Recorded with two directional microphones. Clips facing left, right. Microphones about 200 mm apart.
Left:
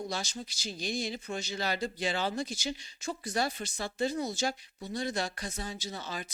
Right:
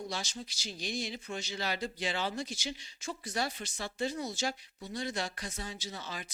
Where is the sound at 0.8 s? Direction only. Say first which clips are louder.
Left 3 dB; 45° left (ahead or behind).